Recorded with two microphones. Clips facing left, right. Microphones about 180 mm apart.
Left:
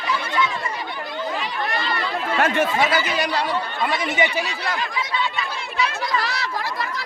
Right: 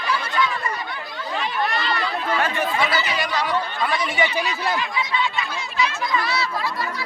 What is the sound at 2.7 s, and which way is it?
Speech, 45° left (ahead or behind).